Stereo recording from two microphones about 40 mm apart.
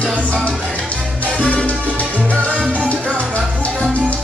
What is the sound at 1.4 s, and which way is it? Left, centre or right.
Music, left.